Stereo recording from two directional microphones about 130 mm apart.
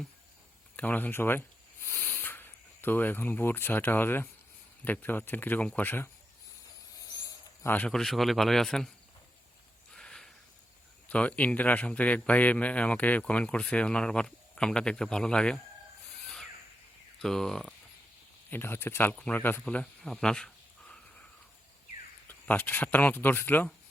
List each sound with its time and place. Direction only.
0.8 s a man's voice: 15° left (ahead or behind)
7.1 s a sound: 30° left (ahead or behind)
7.7 s a man's voice: 10° left (ahead or behind)
9.9 s a sound: 5° left (ahead or behind)
11.1 s a man's voice: 10° left (ahead or behind)
16.2 s a sound: 5° left (ahead or behind)
17.2 s a man's voice: 5° left (ahead or behind)
18.5 s a man's voice: 15° left (ahead or behind)
22.3 s a man's voice: 15° left (ahead or behind)